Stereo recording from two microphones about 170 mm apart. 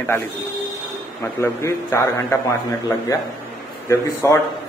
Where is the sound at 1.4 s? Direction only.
15° left (ahead or behind).